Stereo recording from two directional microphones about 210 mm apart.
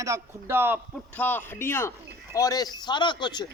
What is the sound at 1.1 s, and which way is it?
A man's voice, 10° left (ahead or behind).